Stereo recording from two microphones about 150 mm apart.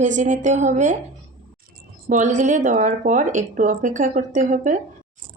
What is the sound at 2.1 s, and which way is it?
A man's voice, 55° right (ahead or behind).